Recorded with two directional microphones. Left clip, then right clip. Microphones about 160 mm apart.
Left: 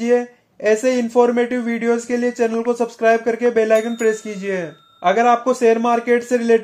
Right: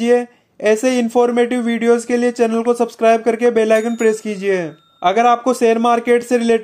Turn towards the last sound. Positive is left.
turn(degrees=-30)  # may be behind; listen again after turning